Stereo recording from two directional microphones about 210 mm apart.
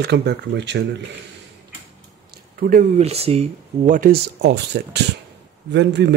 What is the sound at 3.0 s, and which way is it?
Speech, 30° right (ahead or behind).